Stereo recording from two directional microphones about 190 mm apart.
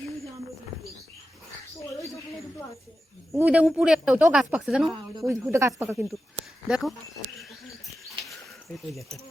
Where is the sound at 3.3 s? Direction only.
5° right (ahead or behind).